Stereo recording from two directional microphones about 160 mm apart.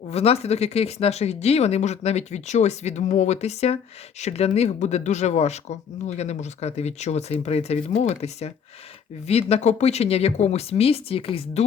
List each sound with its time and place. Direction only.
0.1 s speech: 40° left (ahead or behind)